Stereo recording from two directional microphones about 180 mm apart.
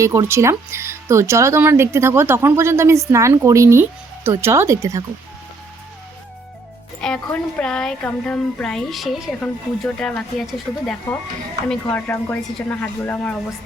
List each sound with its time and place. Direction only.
0.0 s speech: 15° right (ahead or behind)
7.0 s speech: 5° left (ahead or behind)